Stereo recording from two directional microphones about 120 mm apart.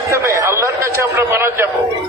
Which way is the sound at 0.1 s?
25° right (ahead or behind).